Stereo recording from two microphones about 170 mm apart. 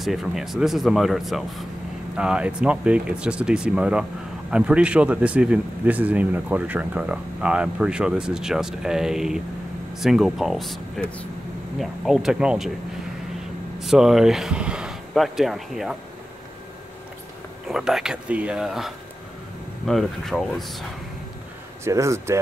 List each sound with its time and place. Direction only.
0.0 s speech: centre (ahead or behind)
13.7 s speech: centre (ahead or behind)
17.6 s speech: 5° right (ahead or behind)
21.8 s speech: 15° right (ahead or behind)